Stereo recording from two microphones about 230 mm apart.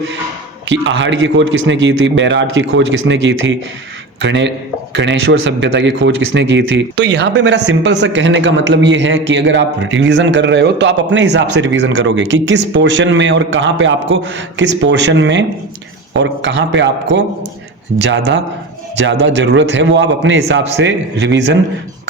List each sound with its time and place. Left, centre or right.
0.7 s speech: right
18.9 s speech: right